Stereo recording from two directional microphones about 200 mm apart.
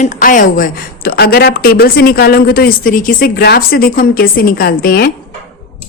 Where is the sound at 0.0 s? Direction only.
40° left (ahead or behind).